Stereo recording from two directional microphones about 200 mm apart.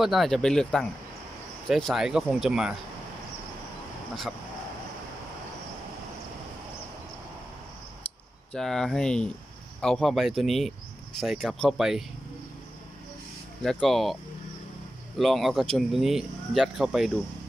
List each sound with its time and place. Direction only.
0.0 s speech: centre (ahead or behind)
8.5 s speech: centre (ahead or behind)
13.6 s speech: centre (ahead or behind)
15.1 s speech: centre (ahead or behind)